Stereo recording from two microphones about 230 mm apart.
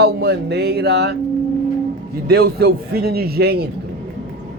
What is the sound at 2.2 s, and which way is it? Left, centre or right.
Music, right.